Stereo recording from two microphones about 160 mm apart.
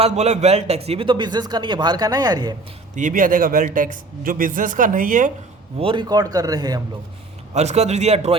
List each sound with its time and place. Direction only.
0.0 s a man's voice: 40° right (ahead or behind); by 2.6 s 25° right (ahead or behind)
2.9 s speech: 55° right (ahead or behind)
5.8 s speech: 30° right (ahead or behind)
7.5 s a man's voice: 45° right (ahead or behind)